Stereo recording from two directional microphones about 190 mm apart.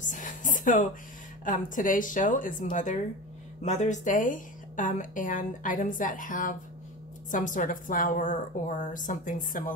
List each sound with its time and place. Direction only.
0.0 s a woman's voice: 40° left (ahead or behind)